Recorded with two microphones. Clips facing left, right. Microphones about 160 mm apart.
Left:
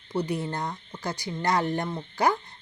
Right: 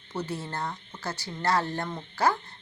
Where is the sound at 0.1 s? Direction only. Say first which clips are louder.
Left 5 dB; 15° left (ahead or behind).